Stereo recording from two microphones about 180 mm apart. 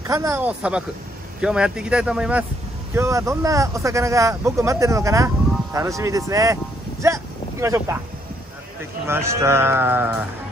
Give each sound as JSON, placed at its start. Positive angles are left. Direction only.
{"t": 0.0, "sound": "speech", "side_deg": -15}
{"t": 2.9, "sound": "speech", "side_deg": -15}
{"t": 9.0, "sound": "speech", "side_deg": -15}